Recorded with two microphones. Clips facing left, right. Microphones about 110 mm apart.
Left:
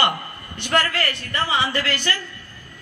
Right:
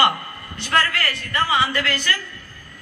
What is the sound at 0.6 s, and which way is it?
A woman's voice, 20° left (ahead or behind).